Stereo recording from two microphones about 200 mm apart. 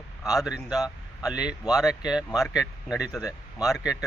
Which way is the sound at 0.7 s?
20° left (ahead or behind).